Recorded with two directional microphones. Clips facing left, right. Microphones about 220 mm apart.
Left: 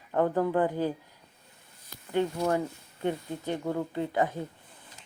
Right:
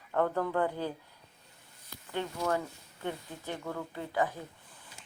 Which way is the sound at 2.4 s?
20° left (ahead or behind).